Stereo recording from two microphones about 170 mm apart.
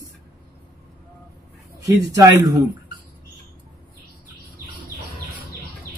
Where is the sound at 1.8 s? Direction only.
20° right (ahead or behind).